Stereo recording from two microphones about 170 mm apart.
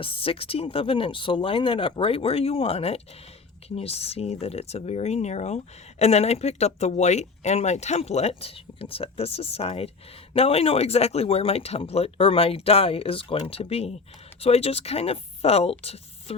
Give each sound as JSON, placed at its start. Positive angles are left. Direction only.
{"t": 0.0, "sound": "a woman's voice", "side_deg": 30}